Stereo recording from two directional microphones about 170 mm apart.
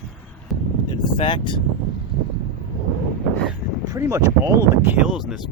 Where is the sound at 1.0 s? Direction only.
30° left (ahead or behind).